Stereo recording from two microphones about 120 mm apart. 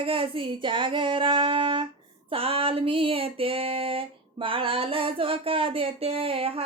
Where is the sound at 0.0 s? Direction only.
45° right (ahead or behind).